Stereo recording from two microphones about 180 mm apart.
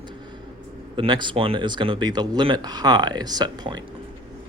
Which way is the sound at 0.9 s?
25° right (ahead or behind).